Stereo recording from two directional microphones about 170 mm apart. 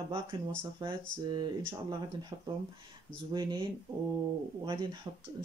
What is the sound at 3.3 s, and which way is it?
Speech, 25° right (ahead or behind).